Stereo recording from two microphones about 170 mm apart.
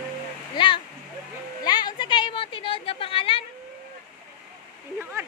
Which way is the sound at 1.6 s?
25° left (ahead or behind).